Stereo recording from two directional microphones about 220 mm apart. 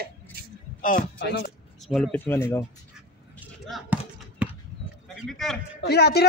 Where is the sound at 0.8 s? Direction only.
45° left (ahead or behind).